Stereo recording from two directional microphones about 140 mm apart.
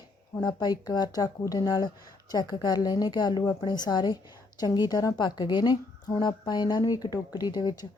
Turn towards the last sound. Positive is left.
turn(degrees=30)  # may be behind; listen again after turning